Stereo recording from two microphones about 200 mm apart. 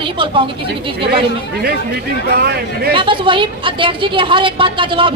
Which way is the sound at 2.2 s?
50° right (ahead or behind).